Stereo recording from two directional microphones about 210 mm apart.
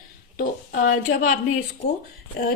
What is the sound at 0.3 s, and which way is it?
A woman's voice, 40° left (ahead or behind).